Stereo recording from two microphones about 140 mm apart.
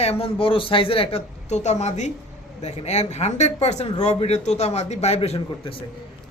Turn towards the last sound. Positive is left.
turn(degrees=40)  # may be behind; listen again after turning